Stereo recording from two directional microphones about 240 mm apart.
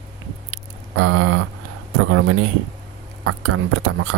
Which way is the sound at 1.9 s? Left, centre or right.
Right.